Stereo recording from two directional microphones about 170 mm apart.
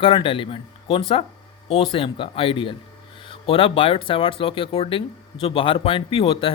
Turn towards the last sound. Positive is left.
turn(degrees=35)  # may be behind; listen again after turning